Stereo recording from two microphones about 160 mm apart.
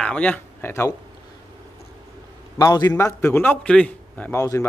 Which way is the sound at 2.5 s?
25° left (ahead or behind).